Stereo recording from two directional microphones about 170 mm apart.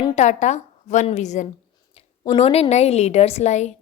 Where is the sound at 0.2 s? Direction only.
45° left (ahead or behind).